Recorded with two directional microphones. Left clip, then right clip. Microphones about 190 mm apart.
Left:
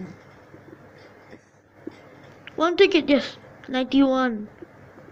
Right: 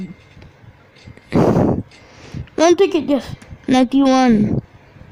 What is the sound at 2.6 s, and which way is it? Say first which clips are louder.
A woman's voice: right 5 dB; 55° right (ahead or behind).